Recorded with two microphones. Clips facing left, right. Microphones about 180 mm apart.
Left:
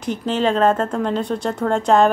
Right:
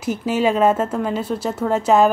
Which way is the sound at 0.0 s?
10° right (ahead or behind).